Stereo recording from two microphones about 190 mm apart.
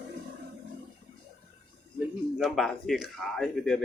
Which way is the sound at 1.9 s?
Centre (ahead or behind).